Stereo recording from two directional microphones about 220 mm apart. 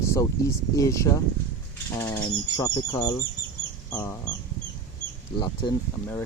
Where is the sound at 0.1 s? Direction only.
15° left (ahead or behind).